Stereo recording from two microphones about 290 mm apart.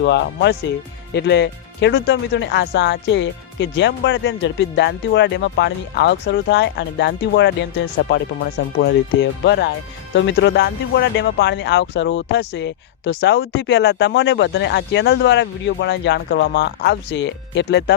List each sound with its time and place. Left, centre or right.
0.0 s speech: left